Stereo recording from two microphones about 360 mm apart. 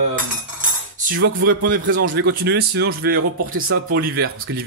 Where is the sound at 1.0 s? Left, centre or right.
Right.